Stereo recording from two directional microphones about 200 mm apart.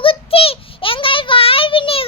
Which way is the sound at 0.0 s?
25° left (ahead or behind).